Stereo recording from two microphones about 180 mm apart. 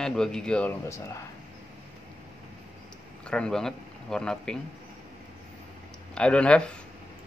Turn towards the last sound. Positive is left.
turn(degrees=5)  # may be behind; listen again after turning